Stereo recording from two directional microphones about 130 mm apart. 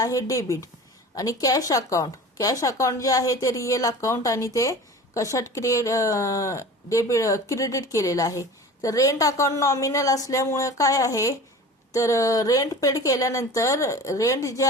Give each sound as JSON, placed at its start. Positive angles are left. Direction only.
{"t": 0.0, "sound": "a woman's voice", "side_deg": 25}